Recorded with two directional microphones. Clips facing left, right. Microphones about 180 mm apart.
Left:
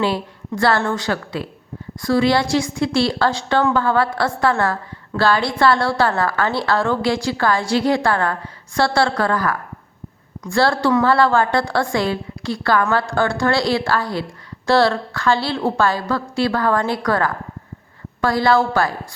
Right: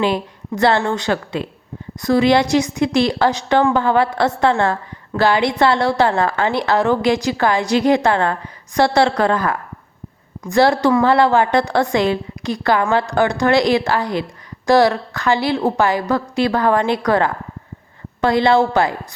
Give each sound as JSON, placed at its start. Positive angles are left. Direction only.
{"t": 0.0, "sound": "a woman's voice", "side_deg": -20}